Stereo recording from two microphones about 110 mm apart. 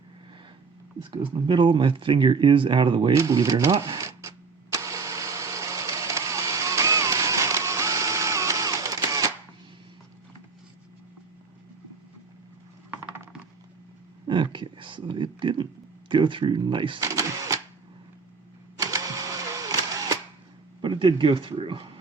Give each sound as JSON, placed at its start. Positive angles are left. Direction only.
{"t": 1.1, "sound": "speech", "side_deg": -45}
{"t": 3.2, "sound": "cash register", "side_deg": -30}
{"t": 14.3, "sound": "a sound", "side_deg": -50}
{"t": 17.0, "sound": "cash register", "side_deg": -30}
{"t": 18.8, "sound": "sewing machine", "side_deg": -30}
{"t": 20.8, "sound": "speech", "side_deg": -45}